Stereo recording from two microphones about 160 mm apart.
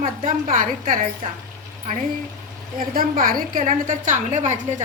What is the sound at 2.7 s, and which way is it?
A woman's voice, 60° right (ahead or behind).